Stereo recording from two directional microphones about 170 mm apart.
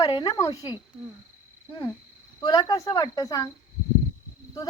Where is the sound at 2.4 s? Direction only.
25° left (ahead or behind).